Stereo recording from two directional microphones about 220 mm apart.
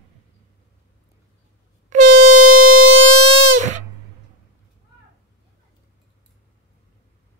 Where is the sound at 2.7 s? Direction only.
65° right (ahead or behind); by 3.6 s 90° right.